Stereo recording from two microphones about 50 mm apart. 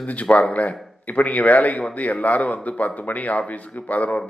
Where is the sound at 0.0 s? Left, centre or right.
Left.